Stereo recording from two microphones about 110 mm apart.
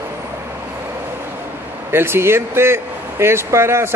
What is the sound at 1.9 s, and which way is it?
Speech, 20° right (ahead or behind).